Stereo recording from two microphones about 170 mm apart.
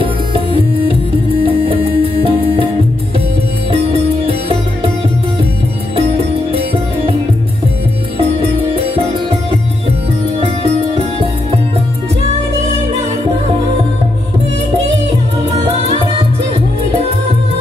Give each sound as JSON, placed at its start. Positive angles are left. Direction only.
{"t": 0.0, "sound": "music", "side_deg": -30}
{"t": 3.7, "sound": "music", "side_deg": -35}
{"t": 8.2, "sound": "music", "side_deg": -35}